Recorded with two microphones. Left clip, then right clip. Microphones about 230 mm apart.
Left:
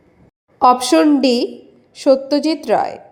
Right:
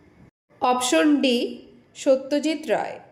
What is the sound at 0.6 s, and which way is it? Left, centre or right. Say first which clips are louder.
A woman's voice: left 8 dB; left.